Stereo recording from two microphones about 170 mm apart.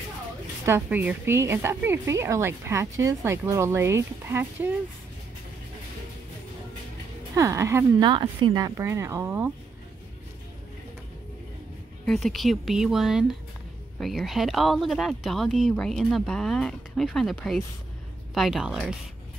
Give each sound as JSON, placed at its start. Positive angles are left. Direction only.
{"t": 0.7, "sound": "a woman's voice", "side_deg": -15}
{"t": 7.3, "sound": "a woman's voice", "side_deg": -15}
{"t": 12.1, "sound": "speech", "side_deg": 0}